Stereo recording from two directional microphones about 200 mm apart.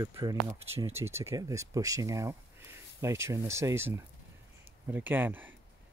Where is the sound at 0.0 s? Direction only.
20° right (ahead or behind).